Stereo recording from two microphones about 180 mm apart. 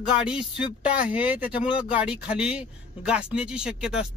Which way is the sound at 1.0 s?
5° right (ahead or behind).